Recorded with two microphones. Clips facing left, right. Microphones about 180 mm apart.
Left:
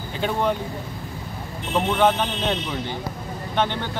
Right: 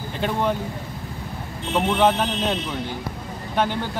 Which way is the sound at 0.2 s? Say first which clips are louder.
Even; centre (ahead or behind).